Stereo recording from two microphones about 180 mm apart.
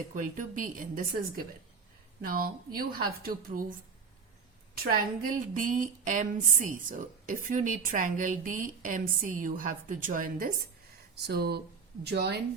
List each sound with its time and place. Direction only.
0.1 s a woman's voice: 50° right (ahead or behind)
4.8 s a woman's voice: 55° right (ahead or behind)
11.1 s a woman's voice: 60° right (ahead or behind)